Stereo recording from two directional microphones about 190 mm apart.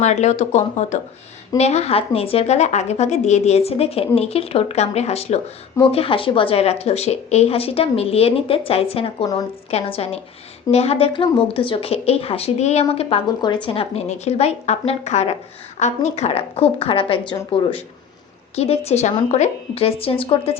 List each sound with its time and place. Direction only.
0.0 s speech: 35° left (ahead or behind)